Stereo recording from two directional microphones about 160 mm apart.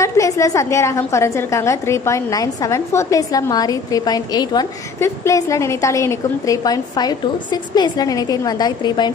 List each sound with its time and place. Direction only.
0.0 s a woman's voice: 20° left (ahead or behind)